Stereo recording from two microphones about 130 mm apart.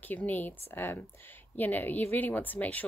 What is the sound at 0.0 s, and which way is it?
Speech, 15° left (ahead or behind).